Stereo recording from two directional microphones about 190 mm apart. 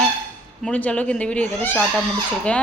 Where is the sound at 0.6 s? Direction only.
5° left (ahead or behind).